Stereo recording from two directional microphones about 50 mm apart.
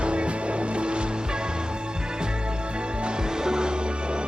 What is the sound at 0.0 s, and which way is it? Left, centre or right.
Music, right.